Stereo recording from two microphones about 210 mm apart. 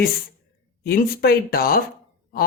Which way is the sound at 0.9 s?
45° left (ahead or behind).